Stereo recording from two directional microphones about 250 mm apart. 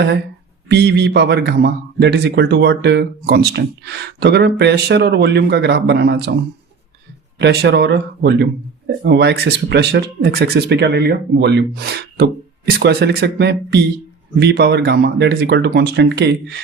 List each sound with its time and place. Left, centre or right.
0.7 s speech: right
7.3 s speech: right